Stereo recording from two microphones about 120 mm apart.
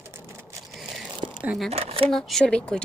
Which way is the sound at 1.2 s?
90° right.